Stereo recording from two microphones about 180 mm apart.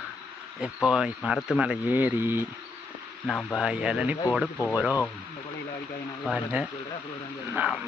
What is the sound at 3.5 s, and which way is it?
Speech, 5° right (ahead or behind).